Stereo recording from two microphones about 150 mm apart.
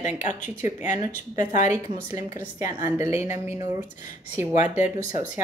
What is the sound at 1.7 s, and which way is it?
A woman's voice, 20° right (ahead or behind).